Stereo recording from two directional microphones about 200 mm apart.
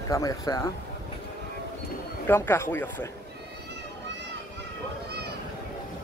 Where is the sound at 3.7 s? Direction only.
60° right (ahead or behind).